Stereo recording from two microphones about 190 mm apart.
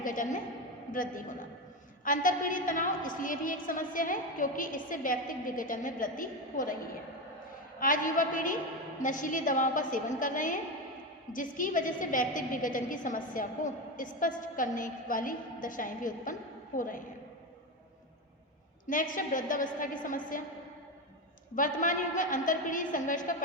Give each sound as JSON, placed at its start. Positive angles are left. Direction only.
{"t": 0.0, "sound": "a woman's voice", "side_deg": 45}
{"t": 7.8, "sound": "a woman's voice", "side_deg": 45}
{"t": 18.9, "sound": "a woman's voice", "side_deg": 45}
{"t": 21.5, "sound": "a woman's voice", "side_deg": 45}